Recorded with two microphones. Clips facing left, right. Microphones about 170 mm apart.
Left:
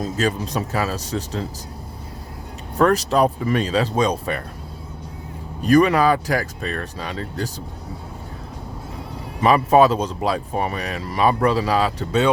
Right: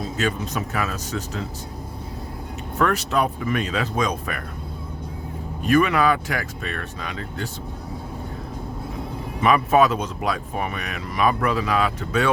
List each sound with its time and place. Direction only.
0.0 s speech: 35° left (ahead or behind)
2.7 s speech: 35° left (ahead or behind)
5.6 s speech: 35° left (ahead or behind)
9.4 s speech: 30° left (ahead or behind)